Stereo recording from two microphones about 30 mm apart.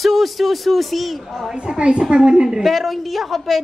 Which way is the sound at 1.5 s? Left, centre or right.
Right.